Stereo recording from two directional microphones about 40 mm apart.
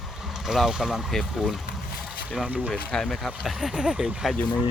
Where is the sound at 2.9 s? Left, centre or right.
Centre.